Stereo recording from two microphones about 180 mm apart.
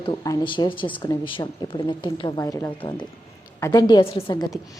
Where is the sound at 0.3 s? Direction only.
25° left (ahead or behind).